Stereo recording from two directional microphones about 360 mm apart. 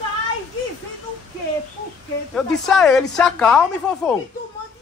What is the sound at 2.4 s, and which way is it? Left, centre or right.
Speech, centre.